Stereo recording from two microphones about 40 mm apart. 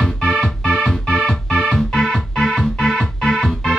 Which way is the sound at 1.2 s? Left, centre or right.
Centre.